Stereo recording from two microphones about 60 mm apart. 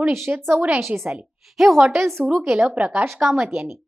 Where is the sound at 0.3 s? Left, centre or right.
Right.